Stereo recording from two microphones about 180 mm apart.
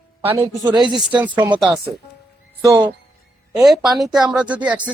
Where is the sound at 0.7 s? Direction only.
25° right (ahead or behind).